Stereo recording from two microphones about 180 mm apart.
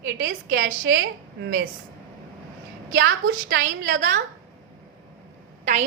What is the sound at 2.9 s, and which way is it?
A woman's voice, 90° right.